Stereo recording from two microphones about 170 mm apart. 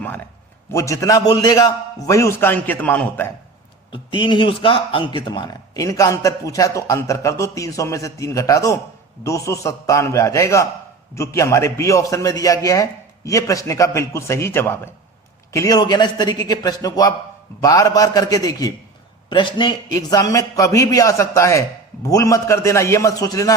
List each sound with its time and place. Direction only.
0.0 s a man's voice: 10° left (ahead or behind)
3.9 s a man's voice: 30° left (ahead or behind)